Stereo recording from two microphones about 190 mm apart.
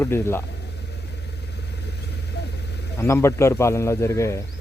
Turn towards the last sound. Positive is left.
turn(degrees=15)  # may be behind; listen again after turning